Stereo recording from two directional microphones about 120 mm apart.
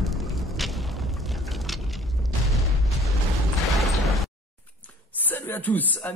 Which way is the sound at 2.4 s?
Centre (ahead or behind).